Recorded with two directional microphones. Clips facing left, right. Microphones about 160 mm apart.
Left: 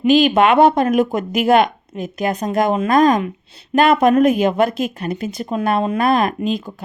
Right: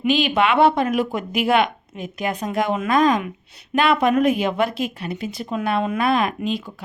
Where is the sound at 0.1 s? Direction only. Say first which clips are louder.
Left 6 dB; 45° left (ahead or behind).